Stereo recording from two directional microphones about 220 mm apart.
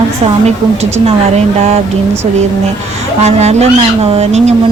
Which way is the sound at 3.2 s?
30° right (ahead or behind).